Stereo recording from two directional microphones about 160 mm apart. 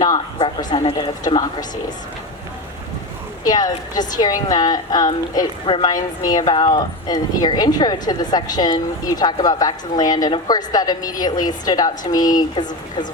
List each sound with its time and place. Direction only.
0.0 s a woman's voice: 25° left (ahead or behind)
3.4 s a woman's voice: 25° left (ahead or behind)